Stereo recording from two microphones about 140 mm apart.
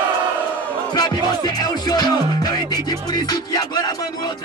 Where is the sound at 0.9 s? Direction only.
30° left (ahead or behind).